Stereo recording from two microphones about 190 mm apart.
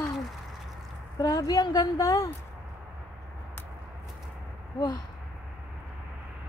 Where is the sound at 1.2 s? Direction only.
20° left (ahead or behind).